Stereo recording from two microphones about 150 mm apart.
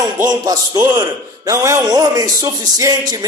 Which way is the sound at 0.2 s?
65° right (ahead or behind).